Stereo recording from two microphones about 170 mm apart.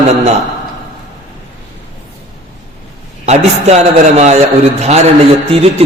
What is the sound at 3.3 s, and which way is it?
A man's voice, 40° right (ahead or behind).